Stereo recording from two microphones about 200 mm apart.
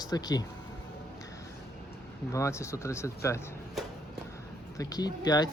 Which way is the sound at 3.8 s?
Centre (ahead or behind).